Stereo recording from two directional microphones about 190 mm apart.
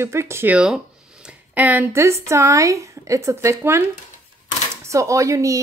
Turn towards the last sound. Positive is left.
turn(degrees=-15)  # may be behind; listen again after turning